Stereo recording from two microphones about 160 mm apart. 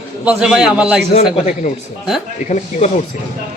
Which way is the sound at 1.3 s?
50° left (ahead or behind).